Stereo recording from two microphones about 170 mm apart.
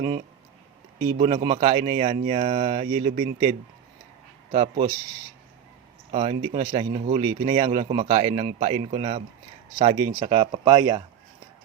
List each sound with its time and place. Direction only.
1.2 s speech: 35° right (ahead or behind)
4.5 s speech: 35° right (ahead or behind)
6.1 s speech: 35° right (ahead or behind)